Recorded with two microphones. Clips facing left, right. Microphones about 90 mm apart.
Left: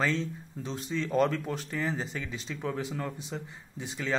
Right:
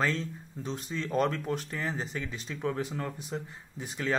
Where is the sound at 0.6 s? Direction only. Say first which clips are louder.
Left 2 dB; centre (ahead or behind).